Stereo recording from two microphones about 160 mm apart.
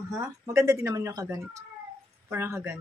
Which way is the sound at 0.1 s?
20° right (ahead or behind).